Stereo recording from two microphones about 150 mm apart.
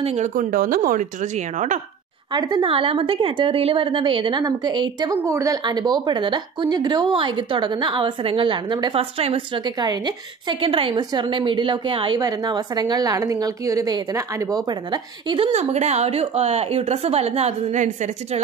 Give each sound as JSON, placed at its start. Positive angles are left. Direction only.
{"t": 0.0, "sound": "speech", "side_deg": -45}
{"t": 0.3, "sound": "speech", "side_deg": -65}
{"t": 2.3, "sound": "a woman's voice", "side_deg": -30}